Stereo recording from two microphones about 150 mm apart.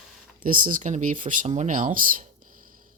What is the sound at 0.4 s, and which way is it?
Speech, 65° right (ahead or behind).